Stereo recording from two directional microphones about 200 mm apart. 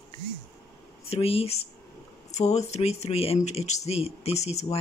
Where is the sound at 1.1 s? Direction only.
30° left (ahead or behind).